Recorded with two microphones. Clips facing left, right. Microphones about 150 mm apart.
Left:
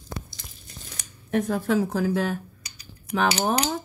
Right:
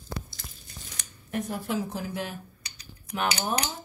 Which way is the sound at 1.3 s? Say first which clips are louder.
Left 7 dB; 90° left.